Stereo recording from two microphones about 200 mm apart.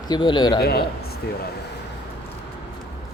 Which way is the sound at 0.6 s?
50° left (ahead or behind).